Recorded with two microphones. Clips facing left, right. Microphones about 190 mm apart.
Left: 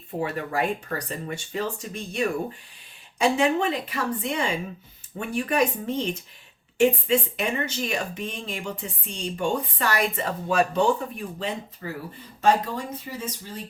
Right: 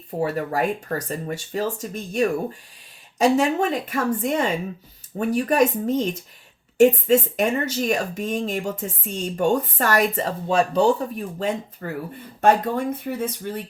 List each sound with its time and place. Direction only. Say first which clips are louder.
0.2 s speech: right 4 dB; 40° right (ahead or behind)
12.4 s speech: right 4 dB; 55° right (ahead or behind)